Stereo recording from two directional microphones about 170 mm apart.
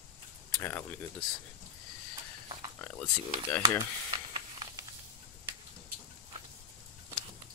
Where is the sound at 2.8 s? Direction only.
10° left (ahead or behind).